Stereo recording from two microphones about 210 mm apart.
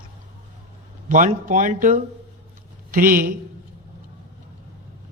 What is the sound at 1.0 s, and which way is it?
Speech, 40° right (ahead or behind).